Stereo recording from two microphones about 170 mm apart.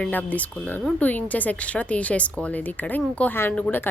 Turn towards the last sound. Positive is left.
turn(degrees=10)  # may be behind; listen again after turning